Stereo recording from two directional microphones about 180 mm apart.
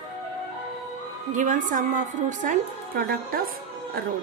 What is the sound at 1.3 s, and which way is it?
A woman's voice, 45° right (ahead or behind).